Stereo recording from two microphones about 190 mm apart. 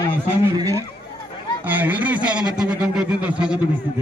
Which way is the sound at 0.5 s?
15° right (ahead or behind).